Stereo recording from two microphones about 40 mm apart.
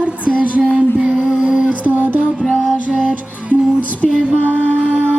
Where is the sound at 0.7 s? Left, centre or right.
Right.